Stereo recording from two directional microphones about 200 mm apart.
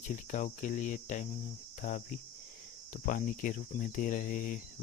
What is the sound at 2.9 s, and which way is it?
Speech, 40° left (ahead or behind).